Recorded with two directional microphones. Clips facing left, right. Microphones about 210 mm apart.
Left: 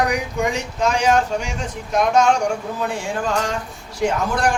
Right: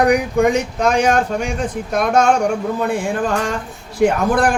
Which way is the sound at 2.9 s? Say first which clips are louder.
Right 4 dB; 55° right (ahead or behind).